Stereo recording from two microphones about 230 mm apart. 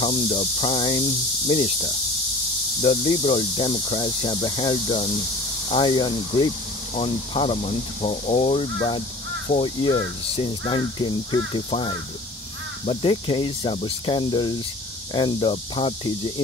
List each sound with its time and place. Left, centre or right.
0.0 s speech: left